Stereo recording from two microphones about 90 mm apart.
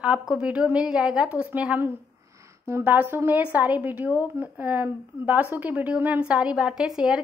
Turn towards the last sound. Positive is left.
turn(degrees=-5)  # may be behind; listen again after turning